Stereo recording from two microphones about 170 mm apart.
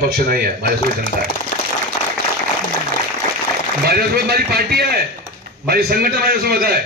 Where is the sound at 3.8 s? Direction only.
65° right (ahead or behind).